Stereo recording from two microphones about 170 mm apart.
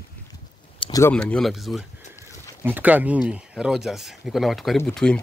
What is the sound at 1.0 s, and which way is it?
Speech, 5° left (ahead or behind).